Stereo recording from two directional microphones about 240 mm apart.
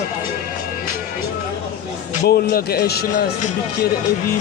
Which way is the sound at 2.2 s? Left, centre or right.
Left.